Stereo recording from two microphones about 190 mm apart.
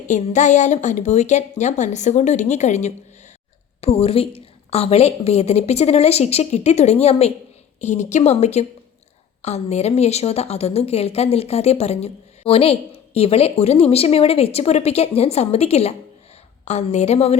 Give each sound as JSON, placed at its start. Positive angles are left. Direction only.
{"t": 0.1, "sound": "a woman's voice", "side_deg": 40}